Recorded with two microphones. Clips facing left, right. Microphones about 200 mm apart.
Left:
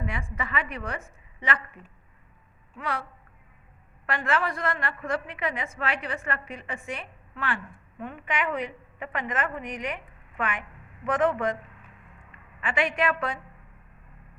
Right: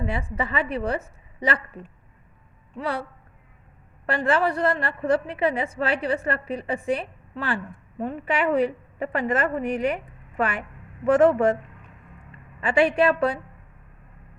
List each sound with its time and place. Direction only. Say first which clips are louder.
0.0 s a woman's voice: right 6 dB; 30° right (ahead or behind)
4.0 s a woman's voice: right 6 dB; 30° right (ahead or behind)